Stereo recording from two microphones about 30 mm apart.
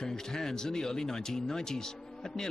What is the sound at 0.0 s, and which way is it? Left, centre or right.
Speech, centre.